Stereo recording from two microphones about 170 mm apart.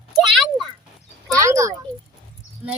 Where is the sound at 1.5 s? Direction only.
20° right (ahead or behind).